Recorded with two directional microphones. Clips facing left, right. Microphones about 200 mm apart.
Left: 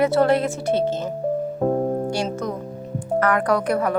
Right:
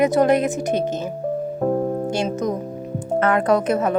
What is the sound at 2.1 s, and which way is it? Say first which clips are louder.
Speech: right 3 dB; 20° right (ahead or behind).